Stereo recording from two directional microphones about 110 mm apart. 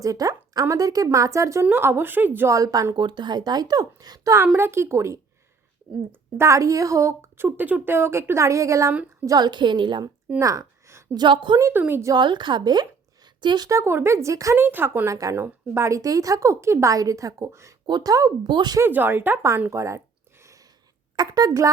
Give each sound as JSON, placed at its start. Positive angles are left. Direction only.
{"t": 0.0, "sound": "speech", "side_deg": -35}
{"t": 2.6, "sound": "speech", "side_deg": -30}
{"t": 2.9, "sound": "a woman's voice", "side_deg": -45}
{"t": 10.4, "sound": "a sound", "side_deg": -30}
{"t": 11.1, "sound": "speech", "side_deg": -40}
{"t": 11.6, "sound": "speech", "side_deg": -20}
{"t": 12.1, "sound": "a woman's voice", "side_deg": -45}
{"t": 13.7, "sound": "speech", "side_deg": -25}
{"t": 17.8, "sound": "speech", "side_deg": -40}
{"t": 18.4, "sound": "a woman's voice", "side_deg": -40}
{"t": 18.8, "sound": "speech", "side_deg": -20}
{"t": 19.7, "sound": "a sound", "side_deg": -25}
{"t": 21.2, "sound": "speech", "side_deg": -35}